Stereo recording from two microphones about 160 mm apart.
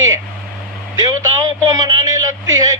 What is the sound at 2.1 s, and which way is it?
Speech, 20° right (ahead or behind).